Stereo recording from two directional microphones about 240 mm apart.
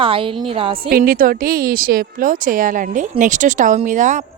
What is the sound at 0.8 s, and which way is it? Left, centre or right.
Speech, right.